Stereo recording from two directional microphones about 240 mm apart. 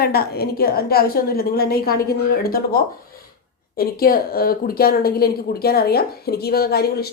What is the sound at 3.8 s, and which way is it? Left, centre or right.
A woman's voice, left.